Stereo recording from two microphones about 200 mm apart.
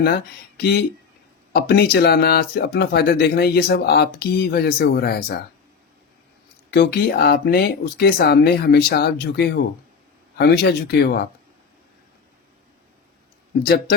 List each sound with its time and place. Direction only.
0.0 s speech: 50° left (ahead or behind)
6.7 s speech: 55° left (ahead or behind)
13.6 s speech: 50° left (ahead or behind)